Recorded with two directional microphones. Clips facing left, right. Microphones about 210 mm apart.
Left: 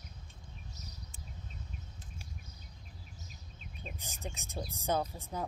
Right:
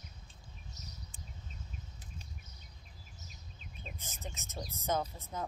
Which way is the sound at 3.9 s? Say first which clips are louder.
Left 3 dB; 15° left (ahead or behind).